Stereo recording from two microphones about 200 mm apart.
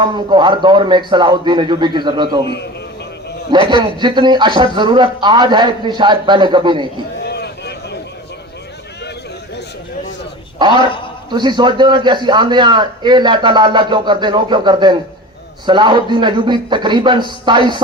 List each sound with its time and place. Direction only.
0.0 s a man's voice: 25° right (ahead or behind)
3.5 s a man's voice: 25° right (ahead or behind)
7.3 s a sound: 55° left (ahead or behind)
11.3 s a man's voice: 20° right (ahead or behind)